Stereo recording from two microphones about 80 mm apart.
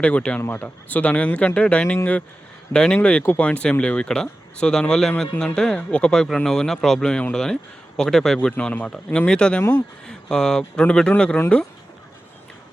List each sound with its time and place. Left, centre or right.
0.0 s speech: centre